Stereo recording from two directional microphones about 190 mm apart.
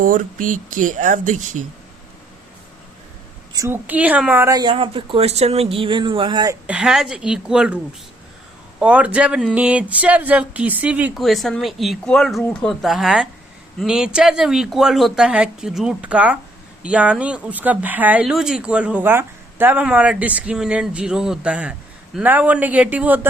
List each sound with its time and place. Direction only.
0.0 s speech: 45° right (ahead or behind)
3.5 s a woman's voice: 15° right (ahead or behind)
6.7 s speech: 5° right (ahead or behind)
8.8 s speech: 5° right (ahead or behind)